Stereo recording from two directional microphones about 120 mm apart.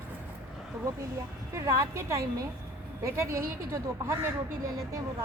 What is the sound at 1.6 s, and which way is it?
Speech, 20° right (ahead or behind).